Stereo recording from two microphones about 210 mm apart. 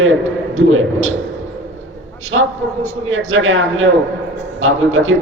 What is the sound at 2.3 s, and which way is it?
Speech, 70° right (ahead or behind).